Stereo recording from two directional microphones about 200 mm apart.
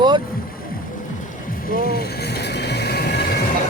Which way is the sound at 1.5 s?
45° left (ahead or behind).